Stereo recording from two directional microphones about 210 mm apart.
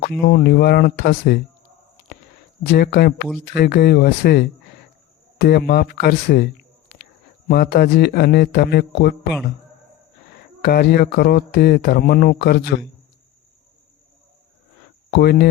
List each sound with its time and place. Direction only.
0.3 s speech: 50° left (ahead or behind)
2.7 s speech: 50° left (ahead or behind)
7.4 s speech: 45° left (ahead or behind)
10.6 s speech: 50° left (ahead or behind)
15.1 s speech: 50° left (ahead or behind)